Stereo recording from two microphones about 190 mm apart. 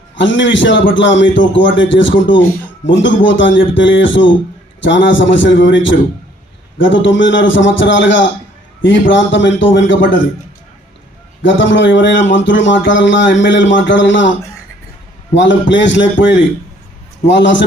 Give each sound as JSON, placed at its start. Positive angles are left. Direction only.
{"t": 0.2, "sound": "speech", "side_deg": 75}
{"t": 11.4, "sound": "speech", "side_deg": 75}
{"t": 15.7, "sound": "speech", "side_deg": 75}